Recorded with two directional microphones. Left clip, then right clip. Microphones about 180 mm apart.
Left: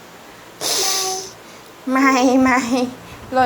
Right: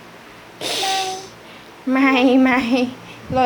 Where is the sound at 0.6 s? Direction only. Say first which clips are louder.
Even; 10° right (ahead or behind).